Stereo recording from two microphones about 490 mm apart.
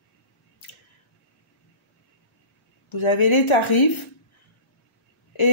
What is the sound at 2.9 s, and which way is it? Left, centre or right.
Speech, left.